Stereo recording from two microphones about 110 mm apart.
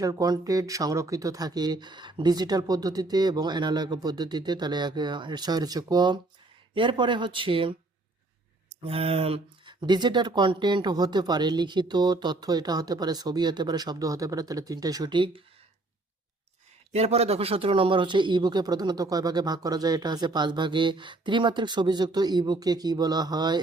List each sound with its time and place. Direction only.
0.0 s speech: 30° right (ahead or behind); by 7.8 s 50° right (ahead or behind)
8.8 s speech: 60° right (ahead or behind)
9.6 s speech: 40° right (ahead or behind)
16.9 s speech: 75° right (ahead or behind); by 23.6 s 40° right (ahead or behind)